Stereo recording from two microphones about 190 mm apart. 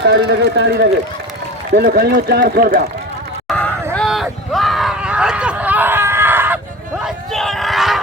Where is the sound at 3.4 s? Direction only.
5° left (ahead or behind).